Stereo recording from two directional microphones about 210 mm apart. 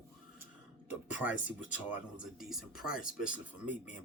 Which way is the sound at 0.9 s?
5° right (ahead or behind).